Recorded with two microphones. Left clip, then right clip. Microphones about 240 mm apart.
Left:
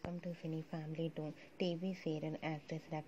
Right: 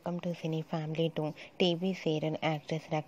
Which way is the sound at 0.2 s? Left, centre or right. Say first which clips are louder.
Right 9 dB; right.